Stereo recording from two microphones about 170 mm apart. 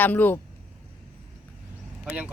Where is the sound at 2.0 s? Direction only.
5° right (ahead or behind).